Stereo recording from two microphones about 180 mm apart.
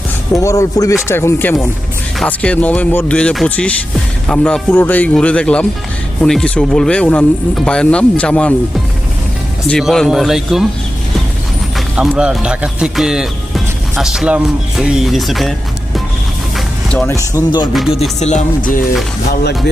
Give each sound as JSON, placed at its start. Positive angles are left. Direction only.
{"t": 0.4, "sound": "speech", "side_deg": 15}
{"t": 9.6, "sound": "speech", "side_deg": 0}
{"t": 11.9, "sound": "speech", "side_deg": -5}
{"t": 16.6, "sound": "music", "side_deg": 5}
{"t": 17.1, "sound": "speech", "side_deg": 20}
{"t": 17.7, "sound": "speech", "side_deg": 0}
{"t": 18.2, "sound": "music", "side_deg": 40}
{"t": 19.3, "sound": "speech", "side_deg": 65}